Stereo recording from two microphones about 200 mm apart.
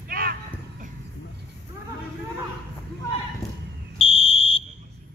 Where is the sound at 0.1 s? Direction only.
45° right (ahead or behind).